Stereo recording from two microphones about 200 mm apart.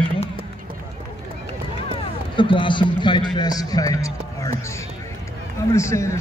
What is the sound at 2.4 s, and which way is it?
A man's voice, 25° left (ahead or behind).